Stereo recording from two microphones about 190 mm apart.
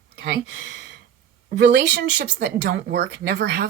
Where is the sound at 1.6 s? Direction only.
65° right (ahead or behind).